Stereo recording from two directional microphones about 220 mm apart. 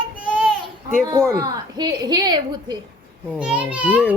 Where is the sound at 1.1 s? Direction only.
20° right (ahead or behind).